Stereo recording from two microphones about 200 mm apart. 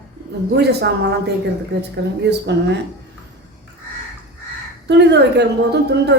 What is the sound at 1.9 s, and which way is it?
Speech, 60° right (ahead or behind).